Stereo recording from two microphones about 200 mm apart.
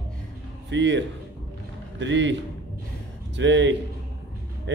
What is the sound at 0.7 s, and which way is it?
Speech, 60° right (ahead or behind).